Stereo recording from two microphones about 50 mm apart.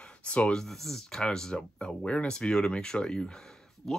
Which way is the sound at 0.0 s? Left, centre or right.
Left.